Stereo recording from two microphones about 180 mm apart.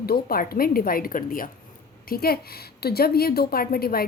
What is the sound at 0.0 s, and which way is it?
A woman's voice, 55° left (ahead or behind).